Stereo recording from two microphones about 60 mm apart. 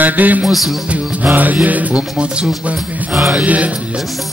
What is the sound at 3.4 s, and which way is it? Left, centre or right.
Music, right.